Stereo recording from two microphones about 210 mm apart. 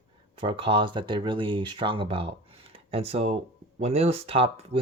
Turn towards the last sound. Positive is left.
turn(degrees=-25)  # may be behind; listen again after turning